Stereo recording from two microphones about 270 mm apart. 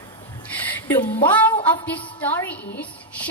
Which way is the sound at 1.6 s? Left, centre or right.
Centre.